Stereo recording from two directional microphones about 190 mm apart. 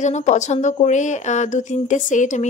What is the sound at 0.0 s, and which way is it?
Speech, 40° left (ahead or behind).